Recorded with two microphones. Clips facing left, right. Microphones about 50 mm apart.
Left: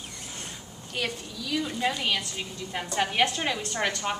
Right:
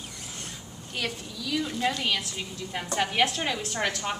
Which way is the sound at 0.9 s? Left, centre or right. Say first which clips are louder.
Left 1 dB; centre.